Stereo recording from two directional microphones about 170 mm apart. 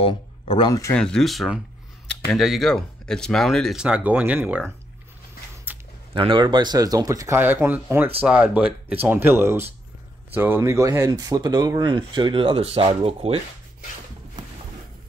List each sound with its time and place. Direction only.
0.0 s speech: 30° left (ahead or behind)
0.9 s speech: 5° left (ahead or behind)
5.7 s a sound: 10° right (ahead or behind)
6.1 s speech: 30° right (ahead or behind)